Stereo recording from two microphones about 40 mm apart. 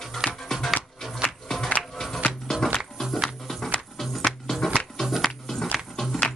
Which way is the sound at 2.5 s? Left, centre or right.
Centre.